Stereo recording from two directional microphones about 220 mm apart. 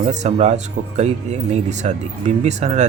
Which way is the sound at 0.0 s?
30° right (ahead or behind).